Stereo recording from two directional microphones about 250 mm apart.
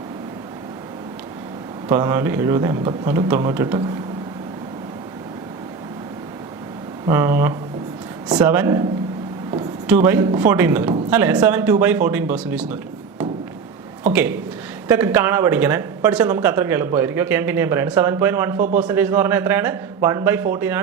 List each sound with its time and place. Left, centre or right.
1.9 s speech: centre
7.1 s speech: centre
9.8 s speech: centre
14.1 s speech: centre
18.5 s a man's voice: right
18.8 s speech: centre